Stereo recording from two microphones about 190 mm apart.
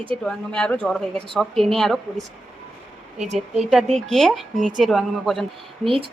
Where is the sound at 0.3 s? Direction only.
5° left (ahead or behind).